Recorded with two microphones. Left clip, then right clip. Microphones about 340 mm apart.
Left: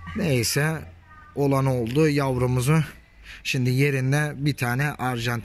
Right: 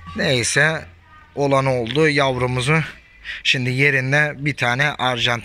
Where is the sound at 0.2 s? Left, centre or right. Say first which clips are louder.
Right 8 dB; centre.